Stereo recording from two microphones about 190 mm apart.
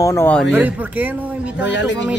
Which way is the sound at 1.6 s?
70° left (ahead or behind).